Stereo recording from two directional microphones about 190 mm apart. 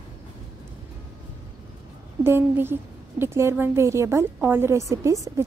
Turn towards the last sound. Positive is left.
turn(degrees=-15)  # may be behind; listen again after turning